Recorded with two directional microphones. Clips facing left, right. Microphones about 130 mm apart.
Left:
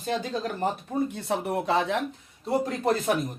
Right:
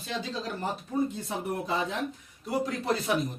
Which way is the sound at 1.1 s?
70° left (ahead or behind).